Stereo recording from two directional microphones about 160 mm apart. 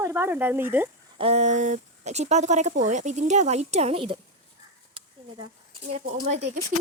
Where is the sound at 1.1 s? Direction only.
40° right (ahead or behind).